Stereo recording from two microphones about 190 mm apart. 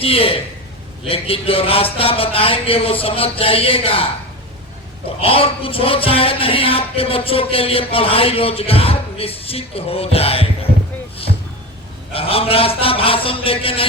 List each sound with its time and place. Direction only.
0.0 s speech: 30° left (ahead or behind)
5.2 s speech: 30° left (ahead or behind)
12.1 s speech: 30° left (ahead or behind)